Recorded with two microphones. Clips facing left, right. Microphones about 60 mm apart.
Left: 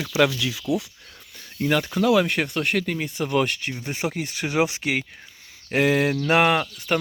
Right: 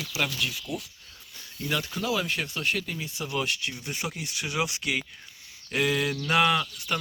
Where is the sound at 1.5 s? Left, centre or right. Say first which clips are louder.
Left 8 dB; left.